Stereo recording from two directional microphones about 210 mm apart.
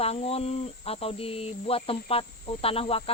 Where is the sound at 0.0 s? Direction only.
30° left (ahead or behind).